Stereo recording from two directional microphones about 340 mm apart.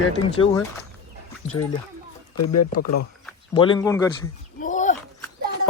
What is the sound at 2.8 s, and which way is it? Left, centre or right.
Speech, left.